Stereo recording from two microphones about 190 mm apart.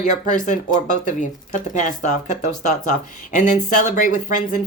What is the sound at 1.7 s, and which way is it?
Speech, 40° left (ahead or behind).